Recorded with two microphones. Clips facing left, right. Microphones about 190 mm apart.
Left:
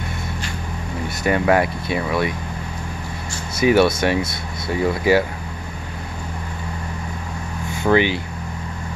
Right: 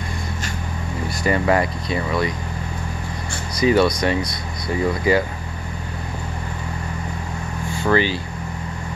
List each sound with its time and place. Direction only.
1.0 s speech: centre (ahead or behind)
3.7 s speech: 5° left (ahead or behind)
7.8 s speech: 15° left (ahead or behind)